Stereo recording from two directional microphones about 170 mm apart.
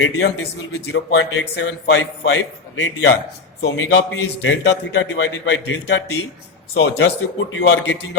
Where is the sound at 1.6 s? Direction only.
90° left.